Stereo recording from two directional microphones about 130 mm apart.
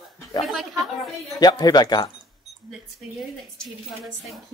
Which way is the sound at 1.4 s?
30° left (ahead or behind).